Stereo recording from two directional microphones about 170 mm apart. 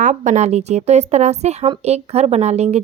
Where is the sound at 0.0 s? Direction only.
45° right (ahead or behind).